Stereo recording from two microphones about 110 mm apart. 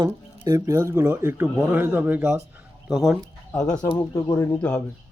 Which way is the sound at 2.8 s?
5° right (ahead or behind).